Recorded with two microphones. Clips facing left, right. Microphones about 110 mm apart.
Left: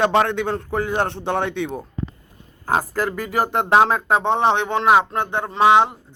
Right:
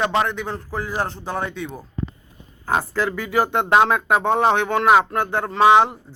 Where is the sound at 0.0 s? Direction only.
65° left (ahead or behind).